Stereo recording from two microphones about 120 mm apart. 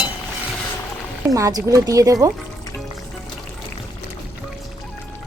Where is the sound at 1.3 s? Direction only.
30° right (ahead or behind).